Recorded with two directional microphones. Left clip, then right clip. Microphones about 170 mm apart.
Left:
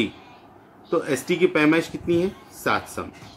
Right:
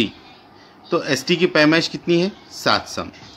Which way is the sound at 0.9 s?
60° right (ahead or behind).